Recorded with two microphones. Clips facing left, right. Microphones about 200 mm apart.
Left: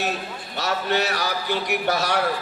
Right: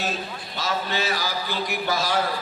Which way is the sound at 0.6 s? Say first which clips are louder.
Left 3 dB; 70° left (ahead or behind).